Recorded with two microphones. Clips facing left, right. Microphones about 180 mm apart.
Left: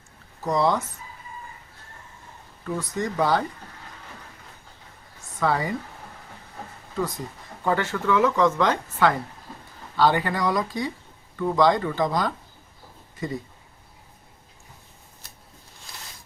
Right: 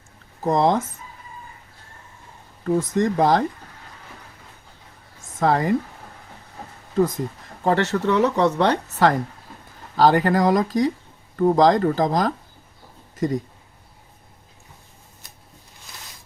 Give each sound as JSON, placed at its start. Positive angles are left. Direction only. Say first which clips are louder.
{"t": 0.4, "sound": "speech", "louder": "right 4 dB", "side_deg": -50}
{"t": 2.6, "sound": "speech", "louder": "right 8 dB", "side_deg": -50}
{"t": 5.4, "sound": "speech", "louder": "right 4 dB", "side_deg": -45}
{"t": 7.6, "sound": "speech", "louder": "right 5 dB", "side_deg": -40}